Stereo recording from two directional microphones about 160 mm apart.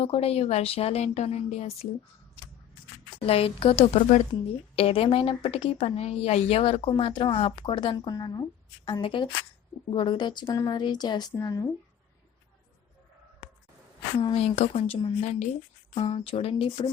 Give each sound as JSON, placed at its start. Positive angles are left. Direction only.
{"t": 0.0, "sound": "a woman's voice", "side_deg": 40}
{"t": 3.2, "sound": "a woman's voice", "side_deg": 35}
{"t": 14.2, "sound": "a woman's voice", "side_deg": 35}